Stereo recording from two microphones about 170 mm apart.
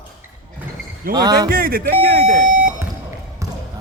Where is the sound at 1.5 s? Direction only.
60° right (ahead or behind).